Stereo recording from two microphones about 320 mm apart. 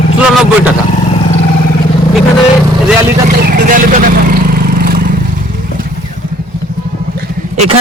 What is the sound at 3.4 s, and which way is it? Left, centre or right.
Vehicle, right.